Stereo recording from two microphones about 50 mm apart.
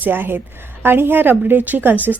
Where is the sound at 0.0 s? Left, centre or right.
Right.